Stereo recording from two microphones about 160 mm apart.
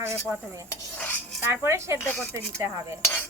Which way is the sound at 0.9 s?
10° left (ahead or behind).